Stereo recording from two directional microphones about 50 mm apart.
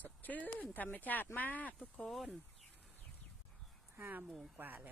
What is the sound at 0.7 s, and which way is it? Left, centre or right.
Speech, left.